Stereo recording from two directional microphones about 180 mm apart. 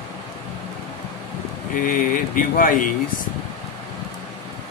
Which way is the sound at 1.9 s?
50° left (ahead or behind).